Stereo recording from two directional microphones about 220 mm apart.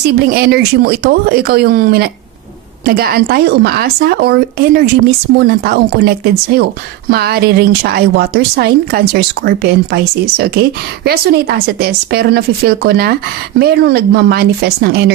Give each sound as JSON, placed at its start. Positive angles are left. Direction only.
{"t": 0.2, "sound": "speech", "side_deg": -45}